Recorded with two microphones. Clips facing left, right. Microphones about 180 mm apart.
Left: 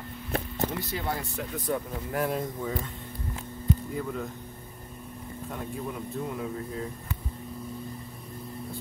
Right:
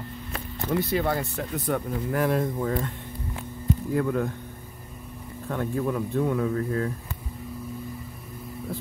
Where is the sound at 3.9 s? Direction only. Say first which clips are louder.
Right 8 dB; 75° right (ahead or behind).